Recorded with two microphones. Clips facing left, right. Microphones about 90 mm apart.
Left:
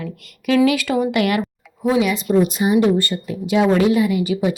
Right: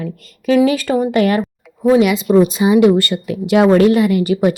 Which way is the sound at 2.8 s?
90° right.